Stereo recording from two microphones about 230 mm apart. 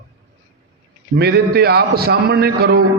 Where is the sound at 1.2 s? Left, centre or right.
Right.